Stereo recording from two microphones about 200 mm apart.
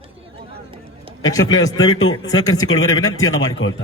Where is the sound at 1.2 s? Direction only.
70° left (ahead or behind).